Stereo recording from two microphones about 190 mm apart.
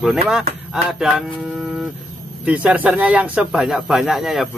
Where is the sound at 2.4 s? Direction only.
5° right (ahead or behind).